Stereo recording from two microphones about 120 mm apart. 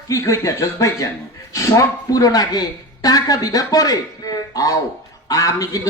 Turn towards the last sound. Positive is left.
turn(degrees=30)  # may be behind; listen again after turning